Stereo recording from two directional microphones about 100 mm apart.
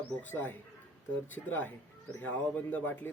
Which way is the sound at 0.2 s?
20° left (ahead or behind).